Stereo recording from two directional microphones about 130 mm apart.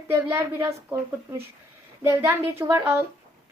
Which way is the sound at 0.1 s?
20° right (ahead or behind).